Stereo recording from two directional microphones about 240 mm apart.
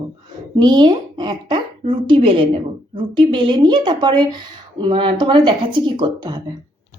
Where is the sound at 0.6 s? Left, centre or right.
Centre.